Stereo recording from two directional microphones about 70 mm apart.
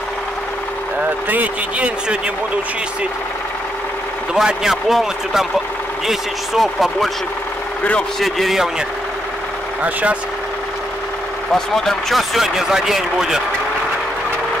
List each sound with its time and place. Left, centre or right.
1.3 s a man's voice: right
4.3 s speech: centre
8.2 s speech: centre
11.5 s speech: centre